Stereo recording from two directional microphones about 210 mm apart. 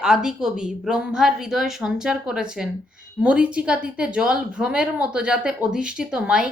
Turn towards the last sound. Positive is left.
turn(degrees=-5)  # may be behind; listen again after turning